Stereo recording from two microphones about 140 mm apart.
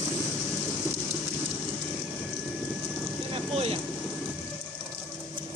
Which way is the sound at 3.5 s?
45° right (ahead or behind).